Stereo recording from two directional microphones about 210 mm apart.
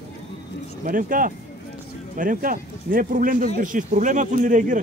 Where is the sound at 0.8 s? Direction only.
40° right (ahead or behind).